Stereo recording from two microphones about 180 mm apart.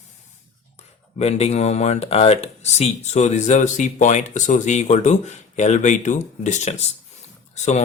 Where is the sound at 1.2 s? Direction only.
35° left (ahead or behind).